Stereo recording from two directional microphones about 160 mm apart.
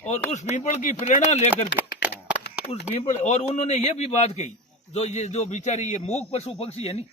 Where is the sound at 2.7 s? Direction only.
40° left (ahead or behind).